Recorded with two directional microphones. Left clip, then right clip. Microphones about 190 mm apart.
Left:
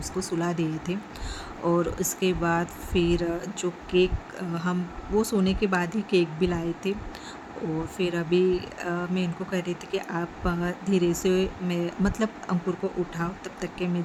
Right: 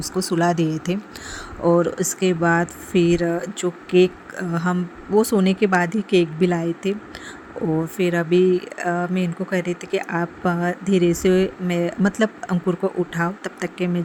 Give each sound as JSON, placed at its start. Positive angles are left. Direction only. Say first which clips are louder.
{"t": 0.0, "sound": "speech", "louder": "right 9 dB", "side_deg": -40}
{"t": 7.9, "sound": "speech", "louder": "right 6 dB", "side_deg": -35}